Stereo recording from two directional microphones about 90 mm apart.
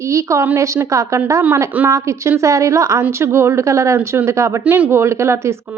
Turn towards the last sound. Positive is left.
turn(degrees=-30)  # may be behind; listen again after turning